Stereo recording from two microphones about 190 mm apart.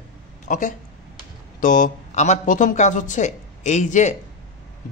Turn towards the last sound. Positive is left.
turn(degrees=40)  # may be behind; listen again after turning